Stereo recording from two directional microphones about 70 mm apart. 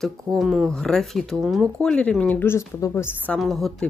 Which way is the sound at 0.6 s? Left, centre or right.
Centre.